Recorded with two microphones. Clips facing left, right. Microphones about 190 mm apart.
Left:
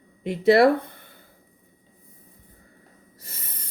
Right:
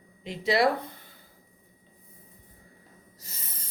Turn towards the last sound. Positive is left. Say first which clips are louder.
# left 3 dB
turn(degrees=60)  # may be behind; listen again after turning